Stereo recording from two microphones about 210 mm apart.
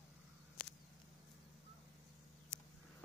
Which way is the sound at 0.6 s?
45° left (ahead or behind).